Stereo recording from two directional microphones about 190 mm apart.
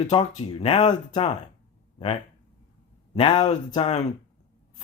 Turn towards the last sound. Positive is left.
turn(degrees=35)  # may be behind; listen again after turning